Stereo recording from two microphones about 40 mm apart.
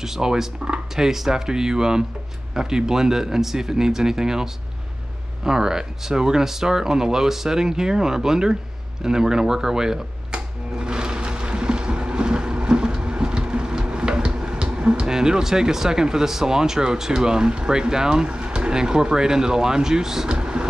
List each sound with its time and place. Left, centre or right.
0.0 s speech: centre
10.3 s a sound: right
20.2 s vehicle: right